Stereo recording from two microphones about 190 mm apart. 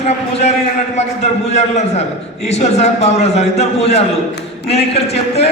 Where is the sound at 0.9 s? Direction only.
35° left (ahead or behind).